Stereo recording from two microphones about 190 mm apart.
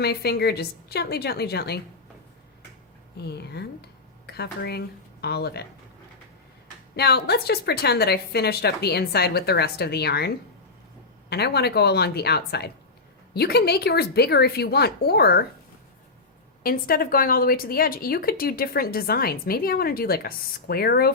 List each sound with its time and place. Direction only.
0.0 s a woman's voice: 60° left (ahead or behind)
3.2 s a woman's voice: 60° left (ahead or behind)
6.9 s a woman's voice: 60° left (ahead or behind)
16.6 s a woman's voice: 50° left (ahead or behind)